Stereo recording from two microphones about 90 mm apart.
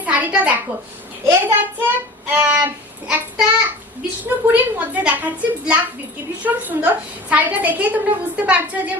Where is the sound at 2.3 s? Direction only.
20° right (ahead or behind).